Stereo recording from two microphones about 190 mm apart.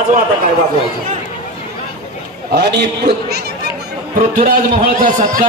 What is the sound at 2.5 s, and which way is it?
Speech, 60° right (ahead or behind).